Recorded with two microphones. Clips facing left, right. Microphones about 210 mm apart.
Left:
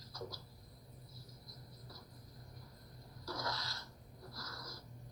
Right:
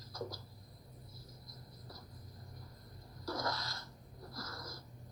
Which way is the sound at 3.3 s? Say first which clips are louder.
Right 4 dB; 50° right (ahead or behind).